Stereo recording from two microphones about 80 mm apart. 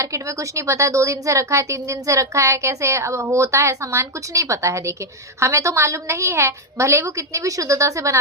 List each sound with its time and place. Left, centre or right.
0.0 s a woman's voice: right